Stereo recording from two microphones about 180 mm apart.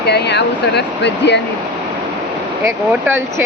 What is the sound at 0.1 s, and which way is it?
Speech, 70° left (ahead or behind).